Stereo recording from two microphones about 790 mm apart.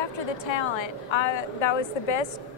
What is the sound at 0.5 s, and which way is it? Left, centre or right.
A woman's voice, left.